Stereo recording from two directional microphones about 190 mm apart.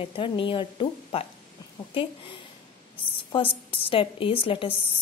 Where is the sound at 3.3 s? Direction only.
30° left (ahead or behind).